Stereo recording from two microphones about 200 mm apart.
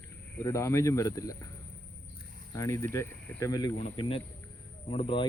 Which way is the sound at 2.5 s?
15° left (ahead or behind).